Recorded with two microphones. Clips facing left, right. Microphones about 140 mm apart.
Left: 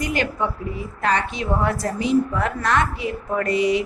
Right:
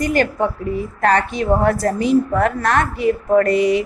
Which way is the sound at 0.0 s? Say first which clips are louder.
Right 6 dB; 45° right (ahead or behind).